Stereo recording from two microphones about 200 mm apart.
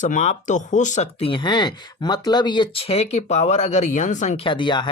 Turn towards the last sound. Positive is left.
turn(degrees=25)  # may be behind; listen again after turning